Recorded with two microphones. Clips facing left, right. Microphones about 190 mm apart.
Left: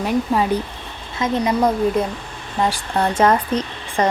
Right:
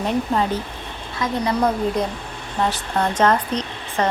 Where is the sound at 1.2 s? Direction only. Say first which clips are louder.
Left 2 dB; 20° left (ahead or behind).